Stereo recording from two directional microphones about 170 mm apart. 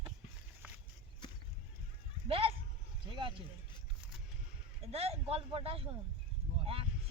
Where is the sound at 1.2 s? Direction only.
25° left (ahead or behind).